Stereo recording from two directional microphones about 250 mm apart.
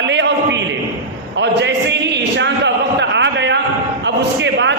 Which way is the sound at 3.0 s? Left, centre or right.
Right.